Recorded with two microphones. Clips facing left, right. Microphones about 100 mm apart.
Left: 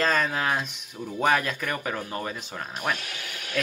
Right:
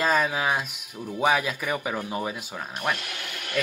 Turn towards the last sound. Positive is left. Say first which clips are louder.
# right 2 dB
turn(degrees=-55)  # may be behind; listen again after turning